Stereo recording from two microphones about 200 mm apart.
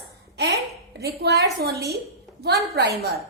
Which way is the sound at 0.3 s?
55° right (ahead or behind).